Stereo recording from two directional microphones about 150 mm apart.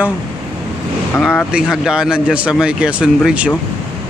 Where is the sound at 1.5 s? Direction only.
5° right (ahead or behind).